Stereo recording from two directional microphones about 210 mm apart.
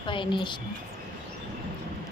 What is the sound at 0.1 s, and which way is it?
Speech, 25° left (ahead or behind).